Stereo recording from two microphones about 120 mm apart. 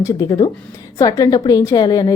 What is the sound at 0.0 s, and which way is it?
A woman's voice, 30° left (ahead or behind).